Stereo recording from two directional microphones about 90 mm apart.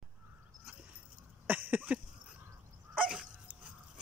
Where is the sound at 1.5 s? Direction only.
20° right (ahead or behind).